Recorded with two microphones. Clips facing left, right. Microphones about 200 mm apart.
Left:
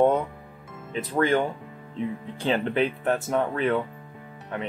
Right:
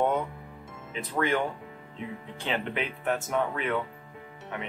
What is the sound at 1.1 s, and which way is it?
Speech, 35° left (ahead or behind).